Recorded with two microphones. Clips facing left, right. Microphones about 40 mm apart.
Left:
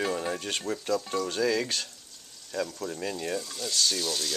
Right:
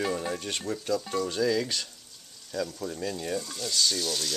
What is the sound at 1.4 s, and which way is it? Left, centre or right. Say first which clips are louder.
Speech: even; centre.